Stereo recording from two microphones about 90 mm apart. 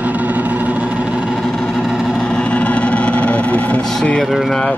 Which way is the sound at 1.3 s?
5° left (ahead or behind).